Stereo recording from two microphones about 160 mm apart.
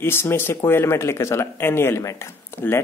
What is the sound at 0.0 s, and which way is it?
Speech, 15° left (ahead or behind).